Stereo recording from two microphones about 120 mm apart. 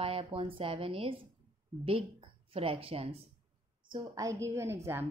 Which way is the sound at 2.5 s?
50° right (ahead or behind).